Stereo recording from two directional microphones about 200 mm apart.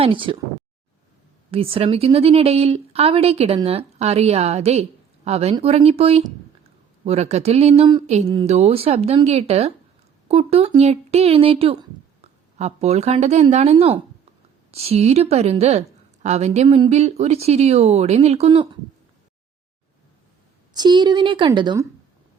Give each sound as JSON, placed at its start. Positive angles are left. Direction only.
{"t": 0.0, "sound": "a woman's voice", "side_deg": -25}
{"t": 1.5, "sound": "speech", "side_deg": -30}
{"t": 20.7, "sound": "a woman's voice", "side_deg": -20}